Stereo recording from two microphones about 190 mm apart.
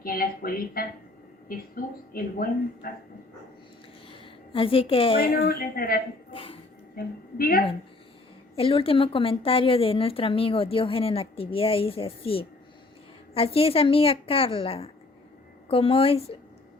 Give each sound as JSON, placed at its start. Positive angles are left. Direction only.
{"t": 0.0, "sound": "a woman's voice", "side_deg": 50}
{"t": 4.2, "sound": "a woman's voice", "side_deg": 30}
{"t": 5.3, "sound": "a woman's voice", "side_deg": 55}
{"t": 6.3, "sound": "a sound", "side_deg": 30}
{"t": 6.9, "sound": "a woman's voice", "side_deg": 50}
{"t": 8.5, "sound": "a woman's voice", "side_deg": 30}